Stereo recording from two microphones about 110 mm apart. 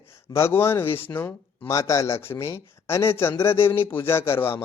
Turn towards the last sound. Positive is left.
turn(degrees=20)  # may be behind; listen again after turning